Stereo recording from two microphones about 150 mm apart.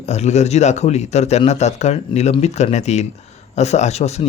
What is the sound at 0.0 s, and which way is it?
A man's voice, 50° left (ahead or behind).